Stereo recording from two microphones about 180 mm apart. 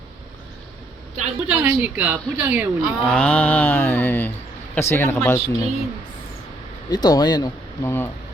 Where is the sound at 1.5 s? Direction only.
10° right (ahead or behind).